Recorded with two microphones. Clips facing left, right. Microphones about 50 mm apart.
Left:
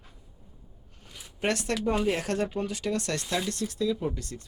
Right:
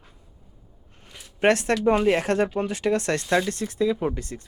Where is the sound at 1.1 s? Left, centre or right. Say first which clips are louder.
Right 9 dB; right.